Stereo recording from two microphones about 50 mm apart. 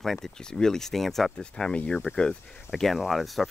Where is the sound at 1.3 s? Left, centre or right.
Centre.